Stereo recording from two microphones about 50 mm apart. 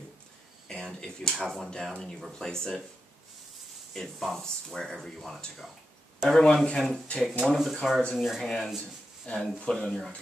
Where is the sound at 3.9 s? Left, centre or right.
Centre.